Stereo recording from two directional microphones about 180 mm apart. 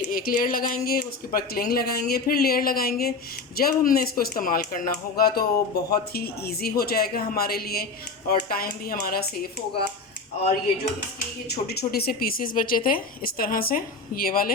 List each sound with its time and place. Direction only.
0.1 s a woman's voice: 55° left (ahead or behind)
11.4 s a woman's voice: 65° left (ahead or behind)